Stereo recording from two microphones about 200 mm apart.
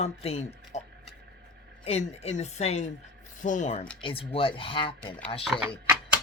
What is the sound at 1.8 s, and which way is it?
Speech, 35° left (ahead or behind).